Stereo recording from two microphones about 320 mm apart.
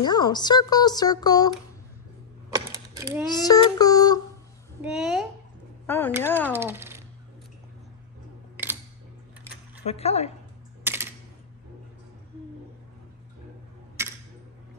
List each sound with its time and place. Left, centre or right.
0.0 s speech: centre
2.5 s typewriter: centre
3.3 s speech: centre
4.8 s speech: centre
6.5 s speech: centre
9.8 s speech: centre
10.8 s typing: centre